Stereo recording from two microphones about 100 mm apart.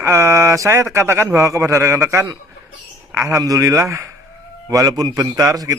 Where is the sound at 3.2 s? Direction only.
35° right (ahead or behind).